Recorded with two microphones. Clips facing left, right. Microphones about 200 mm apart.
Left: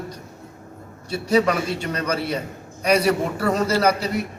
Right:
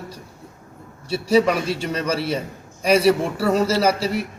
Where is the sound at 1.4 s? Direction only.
10° right (ahead or behind).